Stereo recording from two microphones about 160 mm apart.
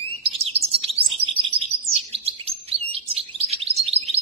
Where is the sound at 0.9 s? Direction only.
35° right (ahead or behind).